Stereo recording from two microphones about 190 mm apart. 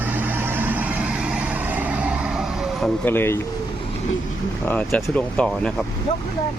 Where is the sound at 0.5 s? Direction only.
10° right (ahead or behind).